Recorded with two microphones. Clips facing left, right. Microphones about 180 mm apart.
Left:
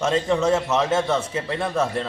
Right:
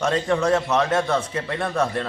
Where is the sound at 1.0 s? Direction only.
5° left (ahead or behind).